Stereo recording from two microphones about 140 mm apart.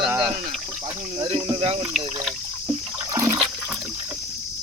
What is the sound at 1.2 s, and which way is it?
Speech, 35° right (ahead or behind).